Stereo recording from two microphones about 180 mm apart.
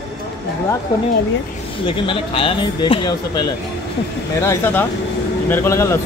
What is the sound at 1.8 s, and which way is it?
Speech, 30° left (ahead or behind).